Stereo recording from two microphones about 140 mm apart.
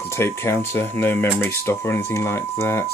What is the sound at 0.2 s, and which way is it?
Speech, 15° left (ahead or behind).